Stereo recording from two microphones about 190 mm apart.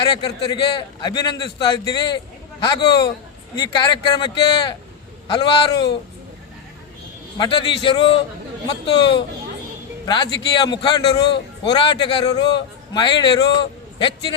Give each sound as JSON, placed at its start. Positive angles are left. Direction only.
{"t": 0.0, "sound": "a man's voice", "side_deg": 25}
{"t": 7.3, "sound": "a man's voice", "side_deg": 25}